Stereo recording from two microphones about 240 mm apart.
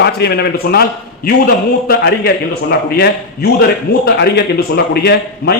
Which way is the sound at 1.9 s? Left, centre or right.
Left.